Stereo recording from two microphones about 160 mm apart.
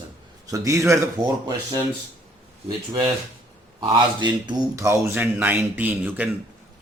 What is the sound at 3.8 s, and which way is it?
Speech, 25° right (ahead or behind).